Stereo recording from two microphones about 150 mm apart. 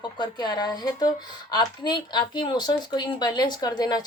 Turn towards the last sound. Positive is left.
turn(degrees=25)  # may be behind; listen again after turning